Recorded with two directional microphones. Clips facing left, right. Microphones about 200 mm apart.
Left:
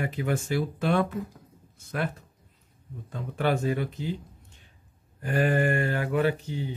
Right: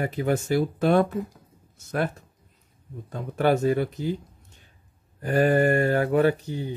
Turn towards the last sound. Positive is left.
turn(degrees=-40)  # may be behind; listen again after turning